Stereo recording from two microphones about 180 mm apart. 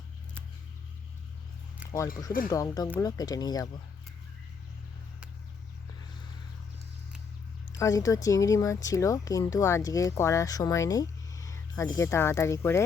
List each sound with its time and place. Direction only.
1.8 s a sound: 5° right (ahead or behind)
2.5 s speech: 20° left (ahead or behind)
7.8 s speech: 20° left (ahead or behind)